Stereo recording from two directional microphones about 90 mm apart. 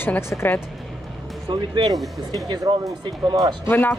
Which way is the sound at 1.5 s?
55° right (ahead or behind).